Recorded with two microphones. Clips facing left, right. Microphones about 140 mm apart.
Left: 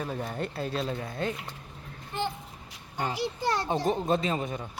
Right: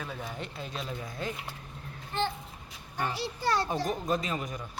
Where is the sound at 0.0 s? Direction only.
40° left (ahead or behind); by 1.3 s 60° left (ahead or behind).